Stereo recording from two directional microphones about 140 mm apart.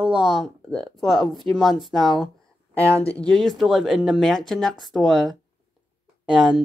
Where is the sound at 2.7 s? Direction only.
20° right (ahead or behind).